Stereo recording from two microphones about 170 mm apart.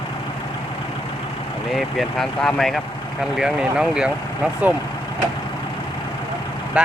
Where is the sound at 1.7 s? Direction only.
Centre (ahead or behind).